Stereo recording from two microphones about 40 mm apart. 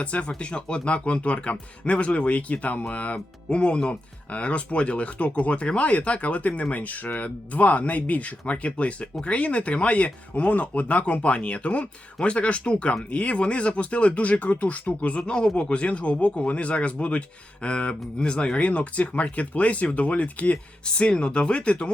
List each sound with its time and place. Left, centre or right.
0.0 s speech: left
15.3 s speech: left
20.8 s speech: left